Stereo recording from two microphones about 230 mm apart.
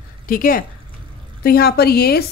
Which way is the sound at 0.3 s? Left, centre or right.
Left.